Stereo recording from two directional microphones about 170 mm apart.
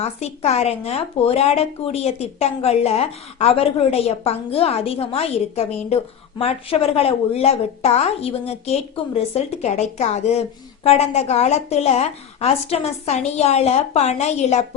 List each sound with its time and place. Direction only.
0.0 s speech: 40° left (ahead or behind)